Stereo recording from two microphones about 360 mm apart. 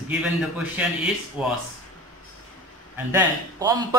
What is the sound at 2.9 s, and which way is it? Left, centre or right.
Speech, centre.